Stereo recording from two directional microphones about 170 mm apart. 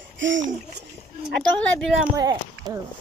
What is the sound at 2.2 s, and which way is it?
Speech, 25° right (ahead or behind).